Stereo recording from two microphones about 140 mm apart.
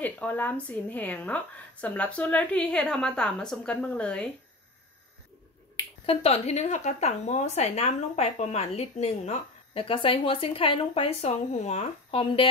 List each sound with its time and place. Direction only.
0.0 s a woman's voice: 10° left (ahead or behind)
6.0 s speech: 45° left (ahead or behind)
9.8 s speech: 40° left (ahead or behind)